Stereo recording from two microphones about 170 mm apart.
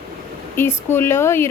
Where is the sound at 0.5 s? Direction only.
15° left (ahead or behind).